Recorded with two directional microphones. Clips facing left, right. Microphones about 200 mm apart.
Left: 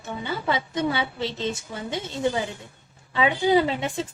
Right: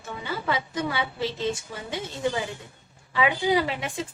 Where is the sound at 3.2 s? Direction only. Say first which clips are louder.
Left 3 dB; 25° left (ahead or behind).